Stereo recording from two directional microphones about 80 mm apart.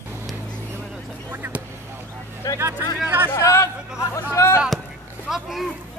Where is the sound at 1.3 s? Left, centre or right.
Right.